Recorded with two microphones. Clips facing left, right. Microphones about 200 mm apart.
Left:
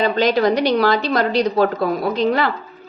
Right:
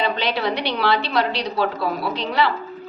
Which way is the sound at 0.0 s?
45° left (ahead or behind).